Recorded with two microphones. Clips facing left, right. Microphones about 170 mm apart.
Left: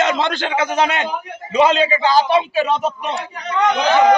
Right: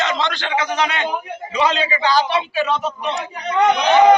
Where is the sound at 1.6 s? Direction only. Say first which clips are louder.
Left 5 dB; 45° left (ahead or behind).